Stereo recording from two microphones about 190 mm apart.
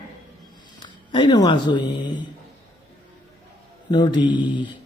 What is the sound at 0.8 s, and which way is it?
Speech, 25° left (ahead or behind).